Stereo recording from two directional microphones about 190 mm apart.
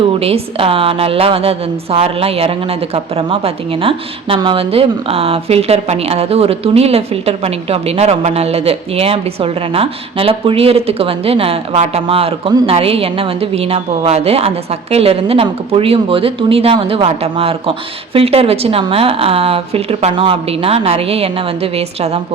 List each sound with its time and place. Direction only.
0.2 s a woman's voice: 30° right (ahead or behind)